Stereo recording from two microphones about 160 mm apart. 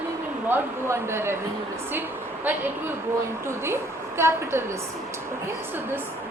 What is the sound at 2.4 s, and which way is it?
A woman's voice, 15° right (ahead or behind).